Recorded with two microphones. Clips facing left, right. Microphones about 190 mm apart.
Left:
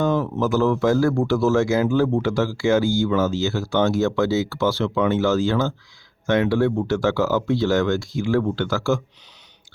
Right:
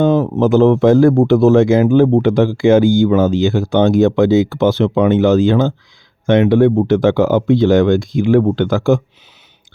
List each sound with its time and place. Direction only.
0.0 s speech: 20° right (ahead or behind)